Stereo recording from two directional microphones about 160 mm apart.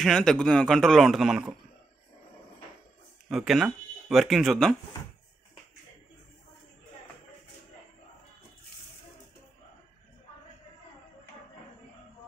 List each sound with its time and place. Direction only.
0.0 s a man's voice: 5° left (ahead or behind)
3.3 s speech: centre (ahead or behind)